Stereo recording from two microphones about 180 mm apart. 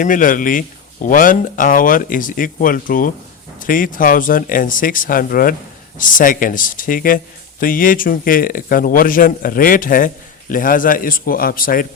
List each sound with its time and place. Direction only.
0.0 s speech: 45° left (ahead or behind)